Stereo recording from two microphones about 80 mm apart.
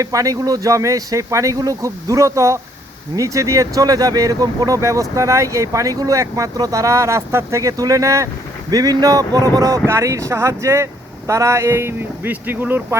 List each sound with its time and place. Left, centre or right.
0.0 s speech: right